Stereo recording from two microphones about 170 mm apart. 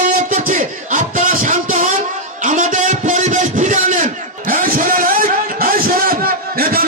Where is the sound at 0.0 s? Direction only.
50° right (ahead or behind).